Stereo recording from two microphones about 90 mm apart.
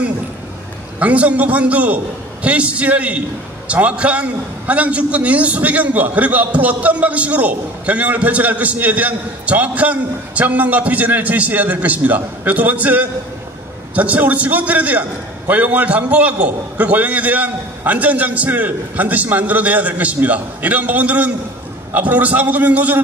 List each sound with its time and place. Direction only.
0.9 s a man's voice: 15° right (ahead or behind)